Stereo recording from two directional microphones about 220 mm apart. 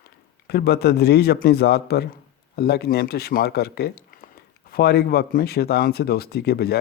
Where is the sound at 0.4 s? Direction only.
45° left (ahead or behind).